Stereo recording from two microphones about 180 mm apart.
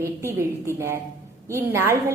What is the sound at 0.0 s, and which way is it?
A woman's voice, 15° right (ahead or behind).